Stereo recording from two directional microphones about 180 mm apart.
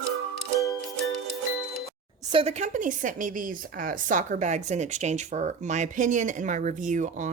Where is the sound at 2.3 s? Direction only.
35° right (ahead or behind).